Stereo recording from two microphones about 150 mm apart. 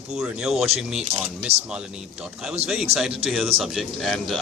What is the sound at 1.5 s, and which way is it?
Speech, 45° right (ahead or behind).